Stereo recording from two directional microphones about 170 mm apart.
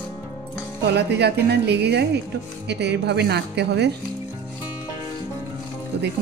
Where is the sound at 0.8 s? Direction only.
75° right (ahead or behind).